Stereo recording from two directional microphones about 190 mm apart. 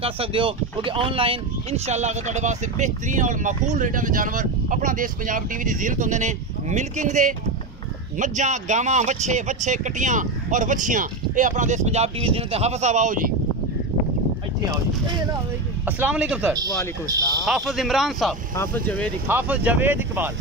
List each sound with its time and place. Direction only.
0.0 s speech: 30° right (ahead or behind)
16.0 s speech: 5° right (ahead or behind)
16.5 s speech: 20° right (ahead or behind)
17.5 s speech: centre (ahead or behind)
19.2 s speech: 10° right (ahead or behind)